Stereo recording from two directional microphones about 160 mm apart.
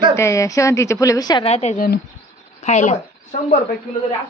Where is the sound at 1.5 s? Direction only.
40° left (ahead or behind).